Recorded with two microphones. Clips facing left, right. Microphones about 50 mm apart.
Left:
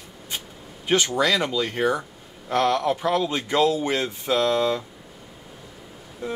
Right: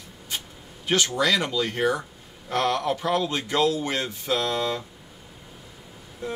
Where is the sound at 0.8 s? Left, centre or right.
Centre.